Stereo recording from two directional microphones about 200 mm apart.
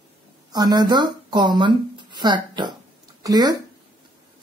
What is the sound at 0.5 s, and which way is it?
Speech, 20° right (ahead or behind).